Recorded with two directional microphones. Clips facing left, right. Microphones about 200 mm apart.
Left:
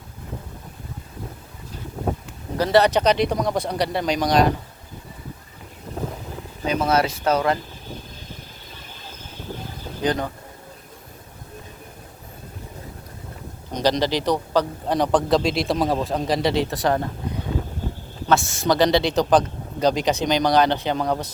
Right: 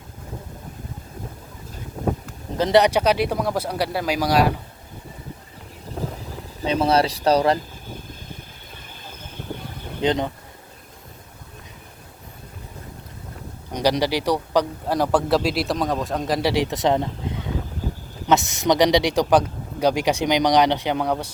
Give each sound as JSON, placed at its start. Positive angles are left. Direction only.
{"t": 2.6, "sound": "speech", "side_deg": -20}
{"t": 6.7, "sound": "speech", "side_deg": -30}
{"t": 10.0, "sound": "speech", "side_deg": -20}
{"t": 13.7, "sound": "speech", "side_deg": -10}
{"t": 18.3, "sound": "speech", "side_deg": -20}